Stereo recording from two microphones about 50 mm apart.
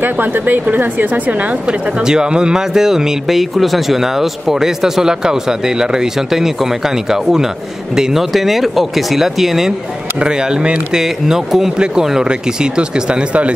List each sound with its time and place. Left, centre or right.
0.0 s a woman's voice: right
2.0 s speech: centre
10.2 s speech: centre